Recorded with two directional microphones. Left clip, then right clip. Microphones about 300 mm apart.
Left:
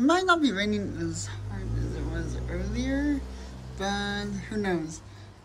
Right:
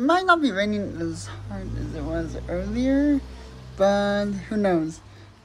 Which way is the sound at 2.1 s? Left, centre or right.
Centre.